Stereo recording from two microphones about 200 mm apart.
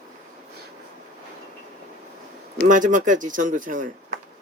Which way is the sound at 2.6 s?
40° right (ahead or behind).